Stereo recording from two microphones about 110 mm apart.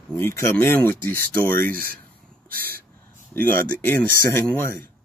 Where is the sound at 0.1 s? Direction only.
20° left (ahead or behind).